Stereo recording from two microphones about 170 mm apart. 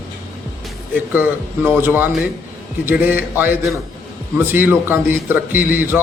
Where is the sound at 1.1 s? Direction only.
10° right (ahead or behind).